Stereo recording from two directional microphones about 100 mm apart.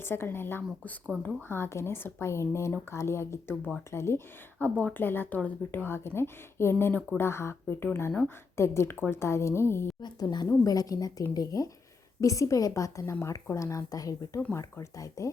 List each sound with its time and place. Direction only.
0.0 s speech: 25° left (ahead or behind)
10.0 s a woman's voice: 45° left (ahead or behind)